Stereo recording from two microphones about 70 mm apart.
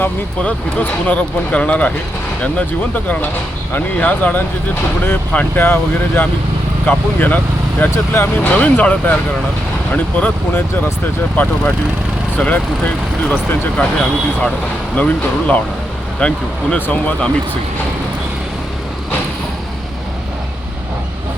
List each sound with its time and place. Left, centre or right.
0.0 s speech: left
12.4 s speech: left